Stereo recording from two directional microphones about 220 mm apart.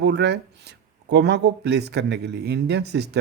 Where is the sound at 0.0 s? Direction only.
50° right (ahead or behind).